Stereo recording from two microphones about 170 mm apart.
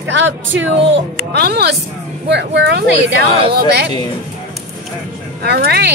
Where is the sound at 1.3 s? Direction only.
75° right (ahead or behind).